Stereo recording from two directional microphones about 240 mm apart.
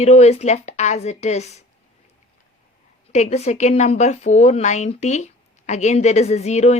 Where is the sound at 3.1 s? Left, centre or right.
Left.